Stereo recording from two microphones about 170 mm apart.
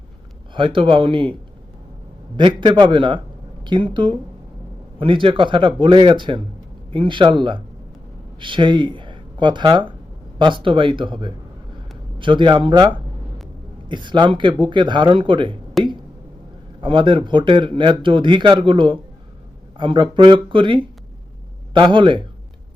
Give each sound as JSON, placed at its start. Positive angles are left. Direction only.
{"t": 0.5, "sound": "speech", "side_deg": -30}
{"t": 2.3, "sound": "a man's voice", "side_deg": -30}
{"t": 15.8, "sound": "speech", "side_deg": 0}
{"t": 16.8, "sound": "a man's voice", "side_deg": -30}